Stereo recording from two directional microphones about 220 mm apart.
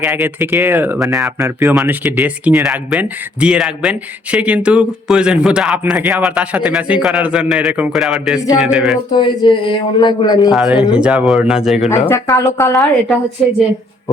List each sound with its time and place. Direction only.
0.0 s speech: 5° right (ahead or behind)
9.1 s a man's voice: 20° left (ahead or behind)
10.5 s speech: 5° right (ahead or behind)
11.9 s a woman's voice: 10° left (ahead or behind)
13.4 s speech: centre (ahead or behind)